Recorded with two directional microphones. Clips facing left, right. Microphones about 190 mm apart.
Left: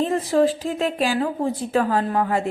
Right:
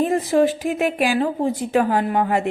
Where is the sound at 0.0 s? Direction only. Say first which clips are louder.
Right 2 dB; 20° right (ahead or behind).